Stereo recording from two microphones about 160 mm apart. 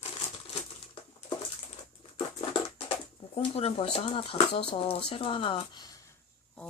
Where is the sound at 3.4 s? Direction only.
35° left (ahead or behind).